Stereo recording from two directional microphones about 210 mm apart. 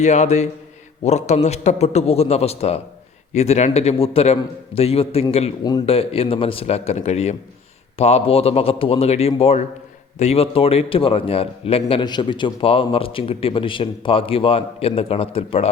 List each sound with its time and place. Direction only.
0.0 s a man's voice: 35° left (ahead or behind)